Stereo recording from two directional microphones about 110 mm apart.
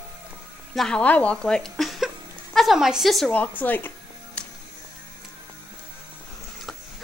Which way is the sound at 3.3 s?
15° left (ahead or behind).